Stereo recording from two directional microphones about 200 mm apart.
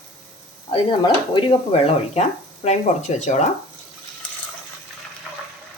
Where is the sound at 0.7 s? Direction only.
25° left (ahead or behind).